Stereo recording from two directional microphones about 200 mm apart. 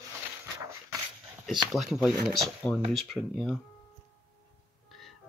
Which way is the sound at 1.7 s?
Centre (ahead or behind).